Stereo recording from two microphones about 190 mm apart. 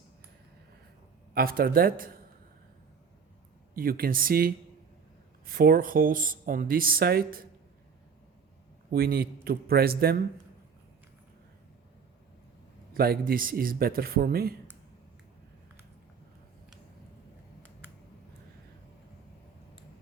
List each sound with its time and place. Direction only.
1.3 s speech: 50° right (ahead or behind)
3.8 s speech: 50° right (ahead or behind)
8.9 s speech: 50° right (ahead or behind)
12.9 s speech: 50° right (ahead or behind)
17.8 s a sound: 10° right (ahead or behind)